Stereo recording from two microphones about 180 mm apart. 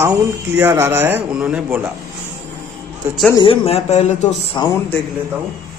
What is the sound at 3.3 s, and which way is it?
Speech, 30° left (ahead or behind).